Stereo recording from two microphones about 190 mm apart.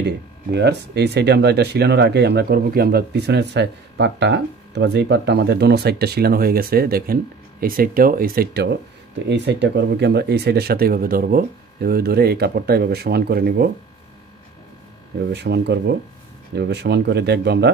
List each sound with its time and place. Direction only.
0.0 s speech: 60° right (ahead or behind)
15.3 s speech: 60° right (ahead or behind)